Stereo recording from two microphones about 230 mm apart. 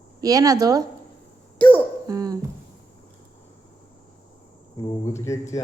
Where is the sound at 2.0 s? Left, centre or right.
Centre.